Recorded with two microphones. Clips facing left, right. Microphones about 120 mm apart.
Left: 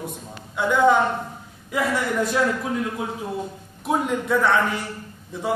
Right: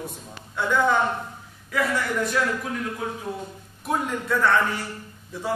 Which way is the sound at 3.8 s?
20° left (ahead or behind).